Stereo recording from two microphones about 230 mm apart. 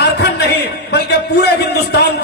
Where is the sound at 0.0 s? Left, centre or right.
Left.